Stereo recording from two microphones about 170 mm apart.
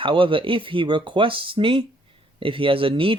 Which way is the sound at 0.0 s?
30° right (ahead or behind).